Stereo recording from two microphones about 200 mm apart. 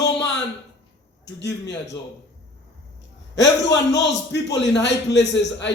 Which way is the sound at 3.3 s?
60° left (ahead or behind).